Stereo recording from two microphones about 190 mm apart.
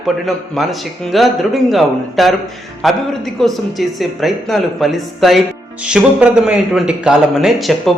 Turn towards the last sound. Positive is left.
turn(degrees=0)  # may be behind; listen again after turning